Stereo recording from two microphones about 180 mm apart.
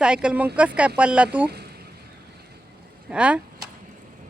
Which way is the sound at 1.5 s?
60° right (ahead or behind).